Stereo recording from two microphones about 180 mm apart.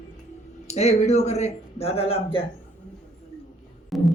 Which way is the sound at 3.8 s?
Centre (ahead or behind).